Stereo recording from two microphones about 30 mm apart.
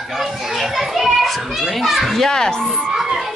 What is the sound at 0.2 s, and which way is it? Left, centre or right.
Children playing, centre.